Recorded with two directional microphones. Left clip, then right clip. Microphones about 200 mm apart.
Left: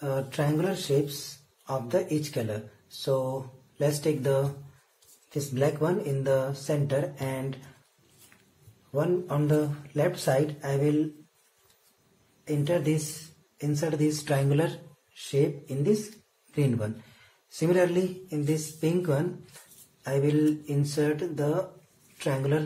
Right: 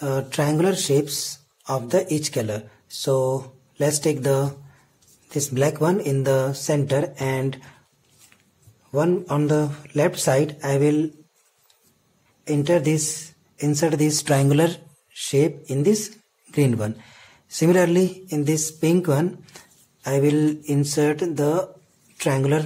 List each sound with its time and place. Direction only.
0.0 s speech: 50° right (ahead or behind)
8.9 s speech: 50° right (ahead or behind)
12.4 s speech: 50° right (ahead or behind)